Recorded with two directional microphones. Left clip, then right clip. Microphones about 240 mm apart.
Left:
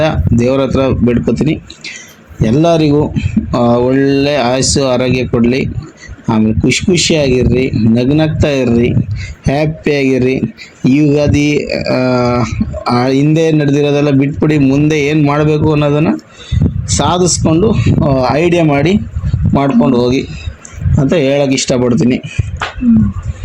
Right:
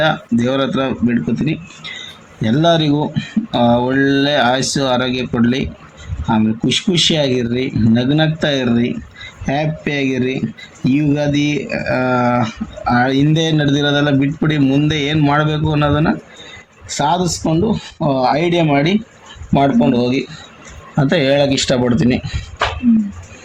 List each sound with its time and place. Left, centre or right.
0.0 s speech: centre
14.6 s speech: centre
14.8 s speech: centre